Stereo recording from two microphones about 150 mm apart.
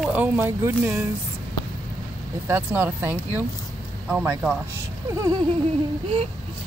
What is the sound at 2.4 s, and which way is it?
Speech, 15° right (ahead or behind).